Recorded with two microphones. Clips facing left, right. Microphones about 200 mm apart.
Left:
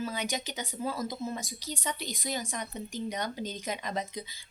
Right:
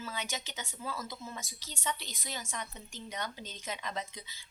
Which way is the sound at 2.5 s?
40° left (ahead or behind).